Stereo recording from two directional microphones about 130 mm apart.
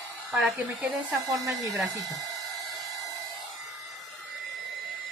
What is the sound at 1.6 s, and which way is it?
Speech, centre (ahead or behind).